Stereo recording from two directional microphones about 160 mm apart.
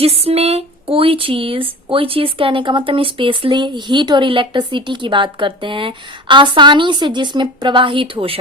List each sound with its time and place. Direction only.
0.0 s speech: 40° right (ahead or behind)